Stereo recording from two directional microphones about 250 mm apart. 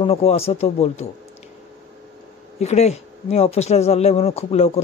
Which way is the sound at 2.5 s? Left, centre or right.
Left.